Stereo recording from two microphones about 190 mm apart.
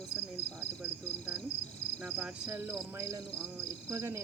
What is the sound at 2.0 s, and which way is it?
Speech, 5° right (ahead or behind).